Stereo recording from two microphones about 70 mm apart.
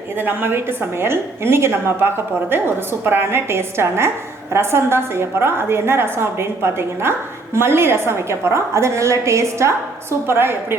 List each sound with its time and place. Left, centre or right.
0.2 s a woman's voice: right